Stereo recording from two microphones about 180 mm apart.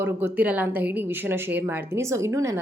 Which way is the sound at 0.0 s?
10° right (ahead or behind).